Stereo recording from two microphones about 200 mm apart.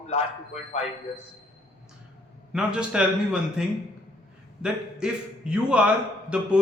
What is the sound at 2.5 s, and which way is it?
A man's voice, 5° right (ahead or behind).